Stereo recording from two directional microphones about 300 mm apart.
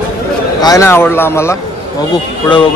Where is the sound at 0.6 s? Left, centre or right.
Centre.